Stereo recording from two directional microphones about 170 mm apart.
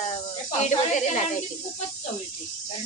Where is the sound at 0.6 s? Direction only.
45° left (ahead or behind).